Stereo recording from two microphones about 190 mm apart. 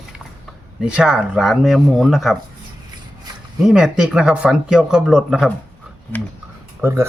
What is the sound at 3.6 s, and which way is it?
Speech, 5° right (ahead or behind).